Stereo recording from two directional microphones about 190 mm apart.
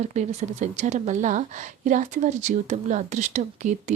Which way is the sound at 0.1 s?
35° right (ahead or behind).